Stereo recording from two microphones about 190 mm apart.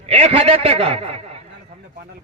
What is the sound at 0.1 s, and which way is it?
A man's voice, 35° right (ahead or behind).